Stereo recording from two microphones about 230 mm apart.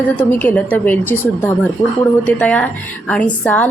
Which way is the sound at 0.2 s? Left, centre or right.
Centre.